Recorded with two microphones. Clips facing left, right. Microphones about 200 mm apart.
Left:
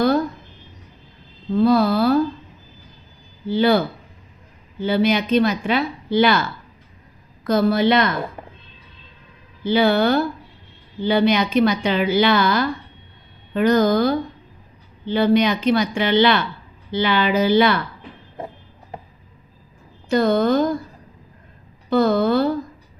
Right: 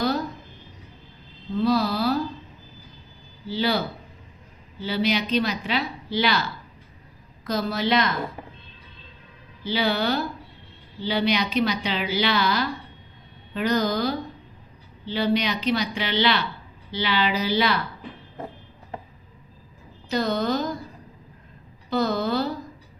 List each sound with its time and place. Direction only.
1.6 s speech: 55° left (ahead or behind)
3.4 s a woman's voice: 55° left (ahead or behind)
7.4 s a woman's voice: 55° left (ahead or behind)
9.6 s a woman's voice: 50° left (ahead or behind)
20.1 s a woman's voice: 50° left (ahead or behind)
21.8 s a sound: 55° left (ahead or behind)